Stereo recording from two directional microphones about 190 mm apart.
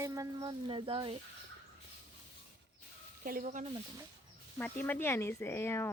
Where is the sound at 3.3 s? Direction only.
45° right (ahead or behind).